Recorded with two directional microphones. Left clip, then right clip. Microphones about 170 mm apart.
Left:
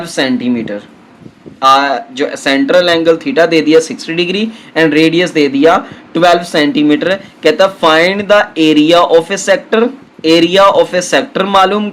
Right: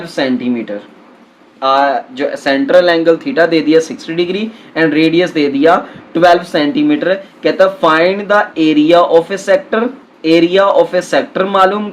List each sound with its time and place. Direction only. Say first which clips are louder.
0.2 s speech: left 1 dB; 35° left (ahead or behind)